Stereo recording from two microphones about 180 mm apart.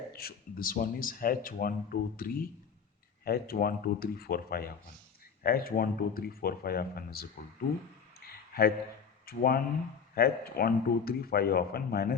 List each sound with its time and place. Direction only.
0.1 s speech: 60° left (ahead or behind)
8.5 s speech: 55° left (ahead or behind)